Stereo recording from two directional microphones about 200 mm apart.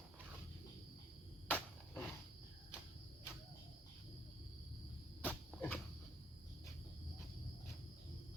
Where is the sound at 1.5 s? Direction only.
10° left (ahead or behind).